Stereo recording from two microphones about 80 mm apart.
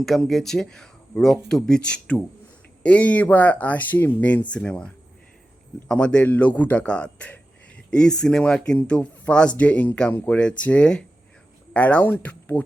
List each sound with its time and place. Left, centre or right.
0.0 s speech: centre
5.9 s speech: centre